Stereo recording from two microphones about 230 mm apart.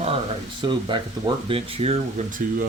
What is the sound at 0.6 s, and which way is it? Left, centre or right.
Speech, right.